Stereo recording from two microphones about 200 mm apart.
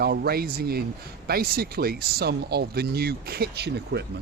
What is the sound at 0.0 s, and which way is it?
Speech, 50° right (ahead or behind).